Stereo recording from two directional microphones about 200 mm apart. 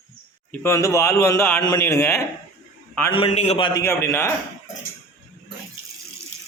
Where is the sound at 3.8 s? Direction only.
15° left (ahead or behind).